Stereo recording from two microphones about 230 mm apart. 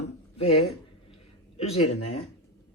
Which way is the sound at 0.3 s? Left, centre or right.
Left.